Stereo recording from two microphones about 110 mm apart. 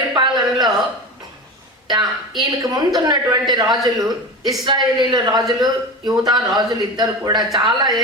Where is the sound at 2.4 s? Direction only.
35° right (ahead or behind).